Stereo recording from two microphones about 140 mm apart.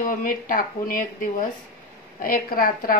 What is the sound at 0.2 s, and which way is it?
Speech, 75° left (ahead or behind).